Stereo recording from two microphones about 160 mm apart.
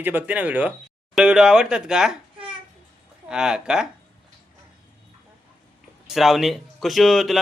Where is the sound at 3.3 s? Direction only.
5° right (ahead or behind).